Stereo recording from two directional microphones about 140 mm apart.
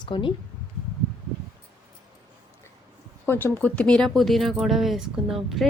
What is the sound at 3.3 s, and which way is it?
Speech, 15° left (ahead or behind).